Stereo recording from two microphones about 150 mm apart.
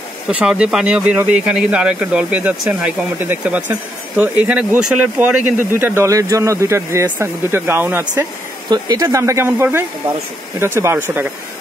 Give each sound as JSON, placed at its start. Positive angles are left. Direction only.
{"t": 0.3, "sound": "speech", "side_deg": -5}
{"t": 8.6, "sound": "speech", "side_deg": -25}